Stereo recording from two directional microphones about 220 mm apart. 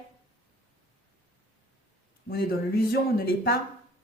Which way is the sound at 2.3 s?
45° left (ahead or behind).